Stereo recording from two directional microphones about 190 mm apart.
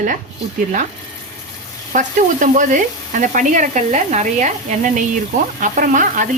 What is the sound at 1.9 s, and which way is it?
Sizzle, 40° right (ahead or behind).